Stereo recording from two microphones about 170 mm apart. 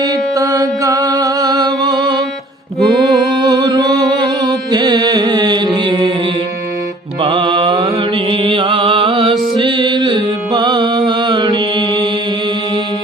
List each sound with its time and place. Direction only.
0.0 s mantra: 20° right (ahead or behind)
2.8 s music: centre (ahead or behind)
3.4 s music: 25° right (ahead or behind)
7.2 s music: 30° right (ahead or behind)